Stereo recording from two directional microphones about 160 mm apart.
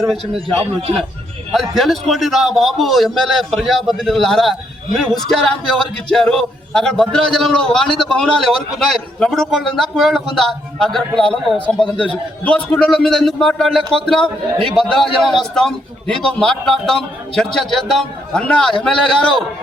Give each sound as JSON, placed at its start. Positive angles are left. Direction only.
{"t": 1.7, "sound": "a man's voice", "side_deg": 0}